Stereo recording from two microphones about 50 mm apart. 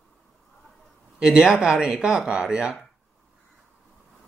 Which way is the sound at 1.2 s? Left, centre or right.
Centre.